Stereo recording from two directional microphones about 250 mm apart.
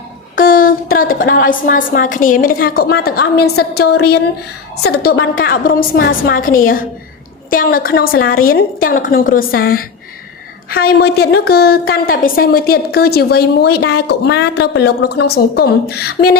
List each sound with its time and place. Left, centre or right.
0.3 s a woman's voice: left